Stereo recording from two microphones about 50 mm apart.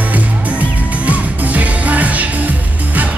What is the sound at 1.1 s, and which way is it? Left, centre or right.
Music, right.